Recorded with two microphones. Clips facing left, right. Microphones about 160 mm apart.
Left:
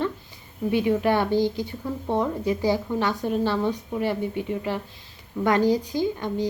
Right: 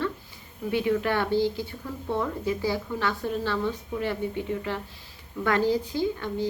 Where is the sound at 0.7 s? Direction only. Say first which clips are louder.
Left 3 dB; 15° left (ahead or behind).